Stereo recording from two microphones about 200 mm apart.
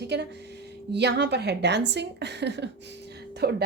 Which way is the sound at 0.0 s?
55° right (ahead or behind).